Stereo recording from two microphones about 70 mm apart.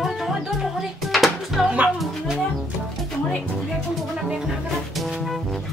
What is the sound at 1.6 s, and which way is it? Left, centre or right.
Music, centre.